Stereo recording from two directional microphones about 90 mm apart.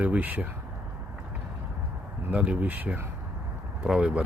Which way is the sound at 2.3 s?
15° right (ahead or behind).